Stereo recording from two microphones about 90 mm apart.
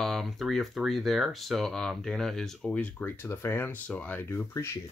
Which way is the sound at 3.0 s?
25° left (ahead or behind).